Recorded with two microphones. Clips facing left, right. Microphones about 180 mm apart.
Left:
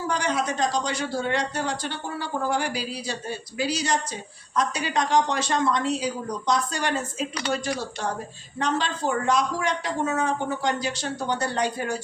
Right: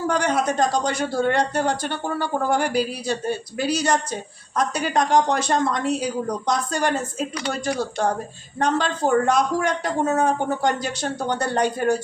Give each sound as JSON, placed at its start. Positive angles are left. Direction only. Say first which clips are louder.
{"t": 0.1, "sound": "speech", "louder": "right 4 dB", "side_deg": -50}